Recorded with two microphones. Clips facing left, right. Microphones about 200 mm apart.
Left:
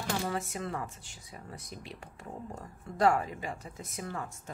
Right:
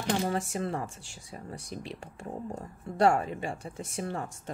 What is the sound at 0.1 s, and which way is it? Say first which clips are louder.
Speech: right 5 dB; 30° right (ahead or behind).